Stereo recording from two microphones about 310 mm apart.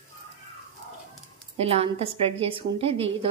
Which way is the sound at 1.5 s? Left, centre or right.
Centre.